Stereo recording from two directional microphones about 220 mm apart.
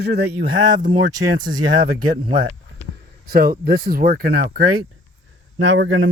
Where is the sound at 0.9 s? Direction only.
20° right (ahead or behind).